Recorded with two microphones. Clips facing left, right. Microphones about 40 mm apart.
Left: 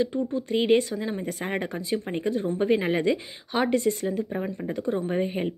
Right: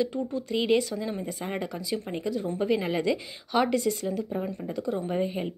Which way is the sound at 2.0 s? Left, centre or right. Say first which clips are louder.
Left 3 dB; left.